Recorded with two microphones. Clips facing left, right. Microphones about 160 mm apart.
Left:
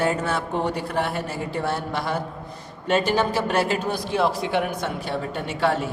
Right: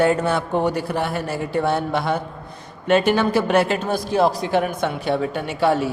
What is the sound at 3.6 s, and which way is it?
Speech, 45° right (ahead or behind).